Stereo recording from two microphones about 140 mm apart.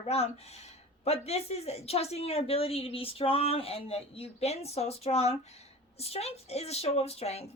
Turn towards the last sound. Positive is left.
turn(degrees=45)  # may be behind; listen again after turning